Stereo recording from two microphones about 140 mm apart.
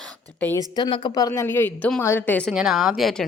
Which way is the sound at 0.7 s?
35° left (ahead or behind).